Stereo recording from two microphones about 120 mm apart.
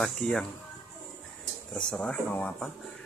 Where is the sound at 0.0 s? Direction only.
5° left (ahead or behind).